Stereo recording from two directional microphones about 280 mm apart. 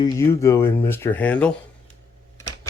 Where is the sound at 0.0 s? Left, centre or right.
Centre.